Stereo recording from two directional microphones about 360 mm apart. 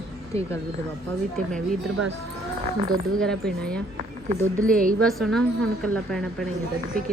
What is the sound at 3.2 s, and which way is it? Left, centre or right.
Speech, centre.